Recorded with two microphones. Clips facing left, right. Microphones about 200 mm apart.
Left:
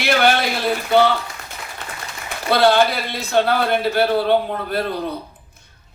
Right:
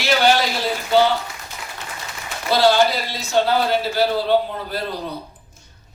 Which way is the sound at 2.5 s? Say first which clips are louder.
Left 1 dB; 60° left (ahead or behind).